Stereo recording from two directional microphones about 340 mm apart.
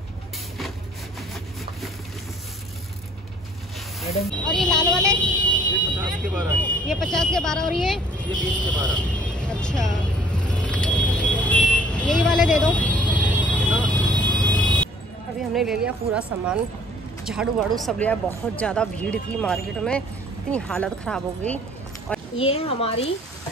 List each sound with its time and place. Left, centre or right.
4.5 s speech: centre
4.7 s vehicle: centre
15.5 s speech: centre
22.4 s speech: centre